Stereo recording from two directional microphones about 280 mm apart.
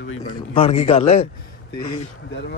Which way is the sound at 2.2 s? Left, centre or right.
Left.